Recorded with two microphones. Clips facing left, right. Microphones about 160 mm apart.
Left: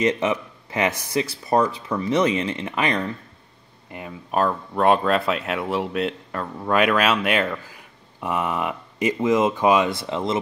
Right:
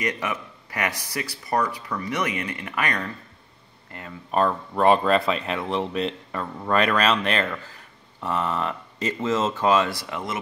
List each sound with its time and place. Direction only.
0.0 s speech: 25° left (ahead or behind)
4.3 s speech: 5° left (ahead or behind); by 10.4 s 25° left (ahead or behind)